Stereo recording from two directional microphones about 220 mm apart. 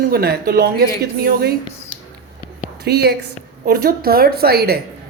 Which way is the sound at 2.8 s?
45° right (ahead or behind).